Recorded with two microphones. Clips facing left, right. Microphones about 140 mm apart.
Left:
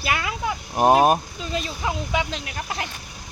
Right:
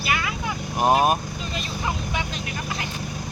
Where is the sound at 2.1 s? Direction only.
75° left (ahead or behind).